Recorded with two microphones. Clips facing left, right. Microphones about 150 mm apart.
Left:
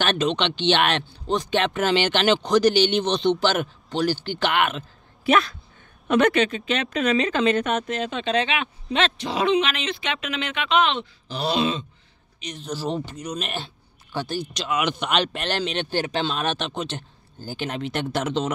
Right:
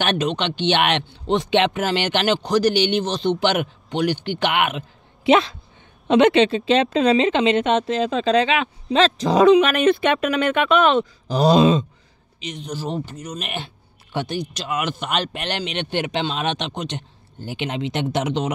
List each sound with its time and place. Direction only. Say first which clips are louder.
0.1 s speech: right 1 dB; 10° right (ahead or behind)
1.7 s speech: even; 10° right (ahead or behind)
4.0 s speech: right 2 dB; 60° right (ahead or behind)
4.4 s speech: right 1 dB; 15° right (ahead or behind)
5.3 s a man's voice: right 4 dB; 25° right (ahead or behind); by 11.8 s 40° right (ahead or behind)
12.4 s speech: even; 65° right (ahead or behind)
13.1 s speech: left 1 dB; 5° right (ahead or behind)
14.1 s a man's voice: right 3 dB; 20° right (ahead or behind)
14.5 s a man's voice: even; 5° right (ahead or behind)